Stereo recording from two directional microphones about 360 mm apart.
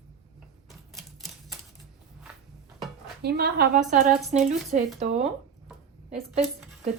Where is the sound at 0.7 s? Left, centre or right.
Centre.